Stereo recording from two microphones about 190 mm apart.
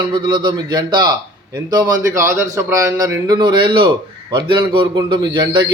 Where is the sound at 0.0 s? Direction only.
25° right (ahead or behind).